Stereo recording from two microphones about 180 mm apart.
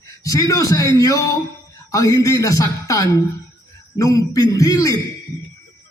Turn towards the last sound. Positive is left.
turn(degrees=20)  # may be behind; listen again after turning